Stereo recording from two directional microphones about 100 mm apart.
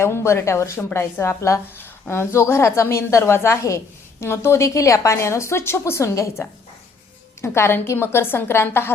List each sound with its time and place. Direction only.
0.0 s a woman's voice: 25° left (ahead or behind)